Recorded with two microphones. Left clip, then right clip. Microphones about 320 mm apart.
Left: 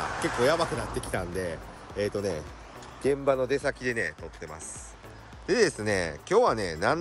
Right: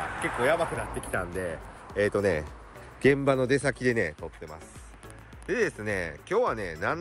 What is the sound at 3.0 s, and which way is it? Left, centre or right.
Speech, right.